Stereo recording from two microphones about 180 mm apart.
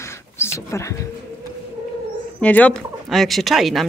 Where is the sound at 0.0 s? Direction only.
15° left (ahead or behind).